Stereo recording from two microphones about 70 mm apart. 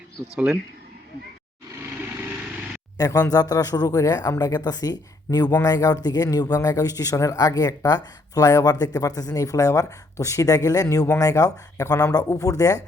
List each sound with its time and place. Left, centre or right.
0.3 s speech: centre
3.0 s speech: left